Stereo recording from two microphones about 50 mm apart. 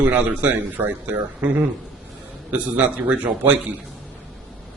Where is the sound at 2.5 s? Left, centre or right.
Right.